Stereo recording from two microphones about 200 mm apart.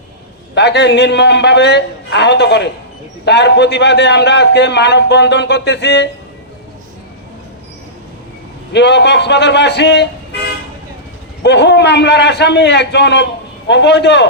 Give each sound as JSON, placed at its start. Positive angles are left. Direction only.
{"t": 0.5, "sound": "a man's voice", "side_deg": 60}
{"t": 8.7, "sound": "a man's voice", "side_deg": 60}
{"t": 11.4, "sound": "a man's voice", "side_deg": 60}